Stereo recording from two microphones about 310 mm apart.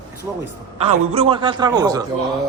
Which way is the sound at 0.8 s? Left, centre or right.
Centre.